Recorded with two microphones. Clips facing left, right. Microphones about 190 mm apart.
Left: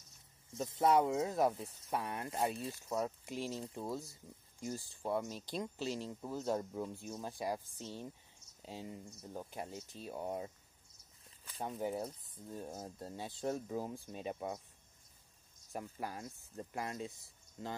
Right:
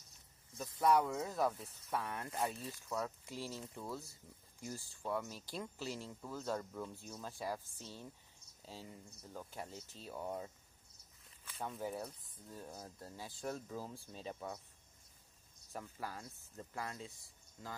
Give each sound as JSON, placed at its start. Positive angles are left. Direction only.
{"t": 0.5, "sound": "speech", "side_deg": 25}
{"t": 2.2, "sound": "speech", "side_deg": 30}
{"t": 3.3, "sound": "speech", "side_deg": 20}
{"t": 3.6, "sound": "speech", "side_deg": 30}
{"t": 4.6, "sound": "speech", "side_deg": 20}
{"t": 11.2, "sound": "a sound", "side_deg": 35}
{"t": 11.8, "sound": "speech", "side_deg": 25}
{"t": 15.7, "sound": "speech", "side_deg": 15}